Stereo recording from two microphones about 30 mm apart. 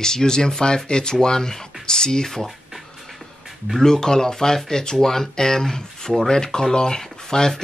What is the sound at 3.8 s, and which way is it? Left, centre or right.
Speech, centre.